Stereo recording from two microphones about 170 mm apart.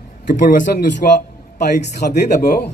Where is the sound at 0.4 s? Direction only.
55° left (ahead or behind).